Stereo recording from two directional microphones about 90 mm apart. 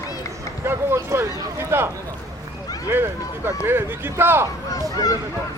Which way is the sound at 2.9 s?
25° right (ahead or behind).